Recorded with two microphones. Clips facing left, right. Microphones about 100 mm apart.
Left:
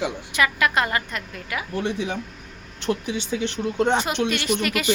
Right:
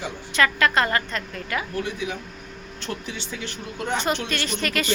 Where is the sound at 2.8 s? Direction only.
15° left (ahead or behind).